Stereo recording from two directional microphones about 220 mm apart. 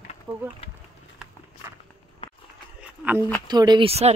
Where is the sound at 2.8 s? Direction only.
5° right (ahead or behind).